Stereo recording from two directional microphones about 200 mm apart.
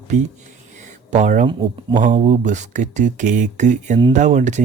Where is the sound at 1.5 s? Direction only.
20° right (ahead or behind).